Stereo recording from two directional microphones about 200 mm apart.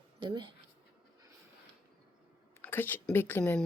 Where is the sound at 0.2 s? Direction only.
25° right (ahead or behind).